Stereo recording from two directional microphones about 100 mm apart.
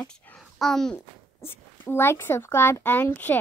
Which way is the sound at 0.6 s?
5° left (ahead or behind).